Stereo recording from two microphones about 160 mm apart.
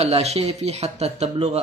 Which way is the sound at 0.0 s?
40° right (ahead or behind).